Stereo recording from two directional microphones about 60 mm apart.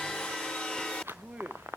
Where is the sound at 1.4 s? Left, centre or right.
Right.